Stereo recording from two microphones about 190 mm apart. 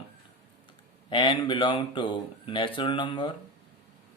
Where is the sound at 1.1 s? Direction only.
25° left (ahead or behind).